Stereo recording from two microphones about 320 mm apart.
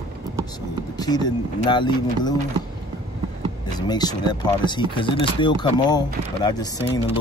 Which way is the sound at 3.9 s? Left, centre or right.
Centre.